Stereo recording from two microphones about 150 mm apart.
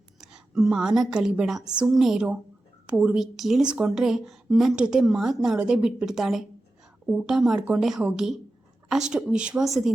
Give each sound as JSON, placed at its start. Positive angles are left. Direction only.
{"t": 0.2, "sound": "a woman's voice", "side_deg": -5}